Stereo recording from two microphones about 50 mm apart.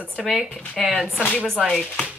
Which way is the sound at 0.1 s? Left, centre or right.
Centre.